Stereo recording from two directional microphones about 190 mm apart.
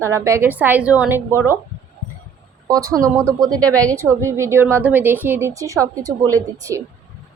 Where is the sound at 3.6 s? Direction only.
5° left (ahead or behind).